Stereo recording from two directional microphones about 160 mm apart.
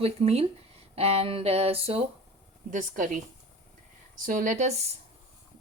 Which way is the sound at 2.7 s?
50° right (ahead or behind).